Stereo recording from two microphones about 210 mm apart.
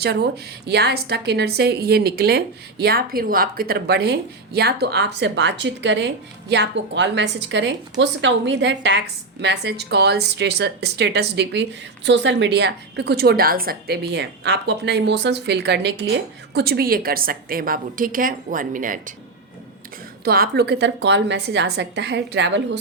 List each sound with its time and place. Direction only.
0.7 s a woman's voice: 50° right (ahead or behind)
20.2 s a woman's voice: 45° right (ahead or behind)